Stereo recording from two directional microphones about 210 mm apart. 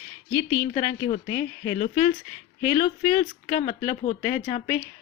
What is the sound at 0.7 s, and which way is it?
Speech, 25° left (ahead or behind).